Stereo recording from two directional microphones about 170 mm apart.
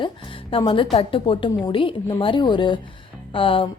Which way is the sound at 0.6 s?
30° left (ahead or behind).